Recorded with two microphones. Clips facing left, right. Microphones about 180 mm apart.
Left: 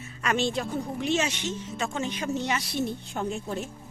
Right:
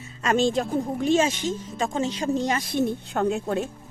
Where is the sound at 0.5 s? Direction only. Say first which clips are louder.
Right 5 dB; 40° right (ahead or behind).